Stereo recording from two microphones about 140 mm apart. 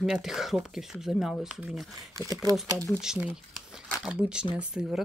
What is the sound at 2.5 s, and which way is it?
Speech, 25° right (ahead or behind).